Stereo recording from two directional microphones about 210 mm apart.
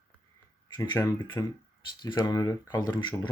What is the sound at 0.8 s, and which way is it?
Speech, 15° left (ahead or behind).